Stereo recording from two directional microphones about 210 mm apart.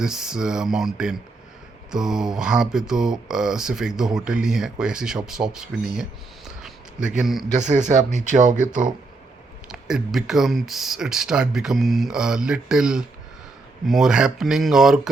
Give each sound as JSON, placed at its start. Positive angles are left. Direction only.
{"t": 0.0, "sound": "speech", "side_deg": -5}
{"t": 7.2, "sound": "speech", "side_deg": 0}
{"t": 7.6, "sound": "speech", "side_deg": -35}
{"t": 9.7, "sound": "speech", "side_deg": 0}